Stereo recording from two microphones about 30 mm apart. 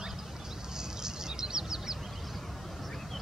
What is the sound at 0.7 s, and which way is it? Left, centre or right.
Bird, right.